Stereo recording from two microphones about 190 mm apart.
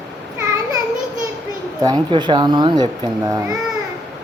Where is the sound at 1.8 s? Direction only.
20° right (ahead or behind).